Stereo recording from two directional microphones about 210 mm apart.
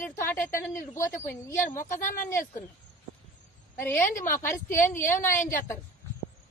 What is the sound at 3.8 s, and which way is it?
Speech, 10° left (ahead or behind).